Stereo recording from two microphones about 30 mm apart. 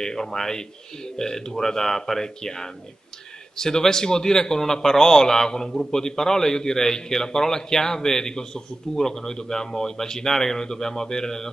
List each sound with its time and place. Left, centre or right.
0.0 s a man's voice: centre